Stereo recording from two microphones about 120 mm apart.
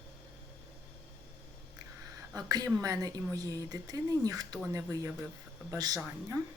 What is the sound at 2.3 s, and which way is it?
A woman's voice, 35° right (ahead or behind).